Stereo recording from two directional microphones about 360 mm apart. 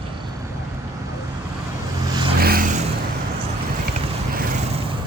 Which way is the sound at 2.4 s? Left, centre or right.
Right.